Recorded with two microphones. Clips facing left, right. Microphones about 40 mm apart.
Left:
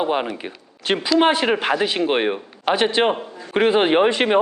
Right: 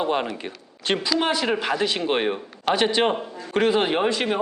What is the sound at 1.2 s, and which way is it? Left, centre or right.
Speech, left.